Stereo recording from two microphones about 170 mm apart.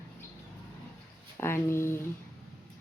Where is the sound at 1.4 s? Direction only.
15° left (ahead or behind).